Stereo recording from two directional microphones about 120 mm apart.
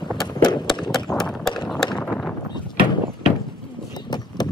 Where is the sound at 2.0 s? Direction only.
10° left (ahead or behind).